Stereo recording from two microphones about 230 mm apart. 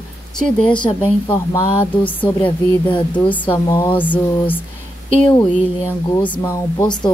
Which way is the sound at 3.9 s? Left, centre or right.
Centre.